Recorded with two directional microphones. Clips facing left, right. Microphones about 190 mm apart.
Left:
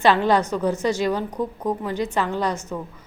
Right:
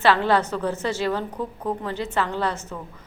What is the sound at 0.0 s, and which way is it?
A woman's voice, 15° left (ahead or behind).